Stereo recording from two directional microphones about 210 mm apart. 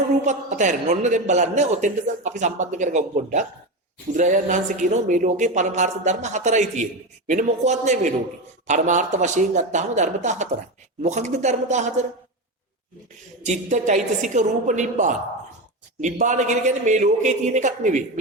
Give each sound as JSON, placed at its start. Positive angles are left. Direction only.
{"t": 0.3, "sound": "a man's voice", "side_deg": -35}
{"t": 13.4, "sound": "a man's voice", "side_deg": -35}